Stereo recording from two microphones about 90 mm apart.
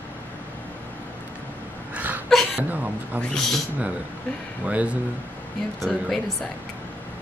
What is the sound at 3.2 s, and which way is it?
Speech, 5° left (ahead or behind).